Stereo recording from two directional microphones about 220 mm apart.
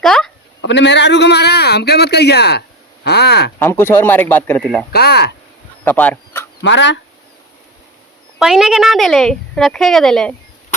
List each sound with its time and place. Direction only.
0.0 s a sound: centre (ahead or behind)
0.6 s speech: 55° left (ahead or behind)
3.6 s speech: 10° left (ahead or behind)
4.9 s speech: 45° left (ahead or behind)
5.8 s speech: 5° left (ahead or behind)
6.6 s speech: 55° left (ahead or behind)
8.4 s speech: centre (ahead or behind)